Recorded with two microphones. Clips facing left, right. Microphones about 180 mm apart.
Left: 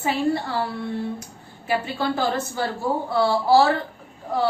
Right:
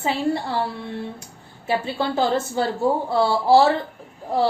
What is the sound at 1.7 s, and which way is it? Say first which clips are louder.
A woman's voice: right 1 dB; 25° right (ahead or behind).